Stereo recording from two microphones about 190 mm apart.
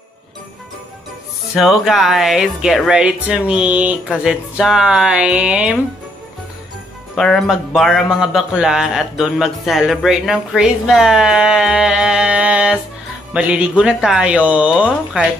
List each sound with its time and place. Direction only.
1.5 s a man's voice: centre (ahead or behind)
7.2 s a man's voice: 5° left (ahead or behind)